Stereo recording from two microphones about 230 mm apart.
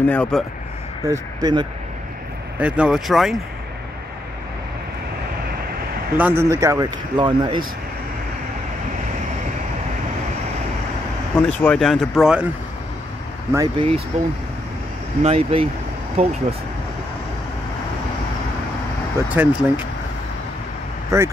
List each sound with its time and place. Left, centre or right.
0.0 s speech: centre
1.0 s speech: centre
2.6 s speech: centre
6.1 s speech: centre
11.3 s speech: centre
13.5 s speech: centre
15.2 s speech: right
19.1 s speech: centre
21.1 s speech: centre